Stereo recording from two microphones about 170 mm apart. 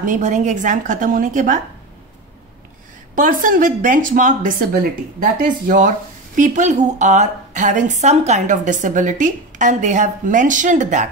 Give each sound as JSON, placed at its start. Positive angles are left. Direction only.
{"t": 0.0, "sound": "speech", "side_deg": -45}
{"t": 3.2, "sound": "speech", "side_deg": -50}